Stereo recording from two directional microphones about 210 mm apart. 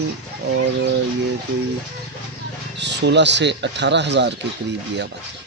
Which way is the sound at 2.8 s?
55° right (ahead or behind).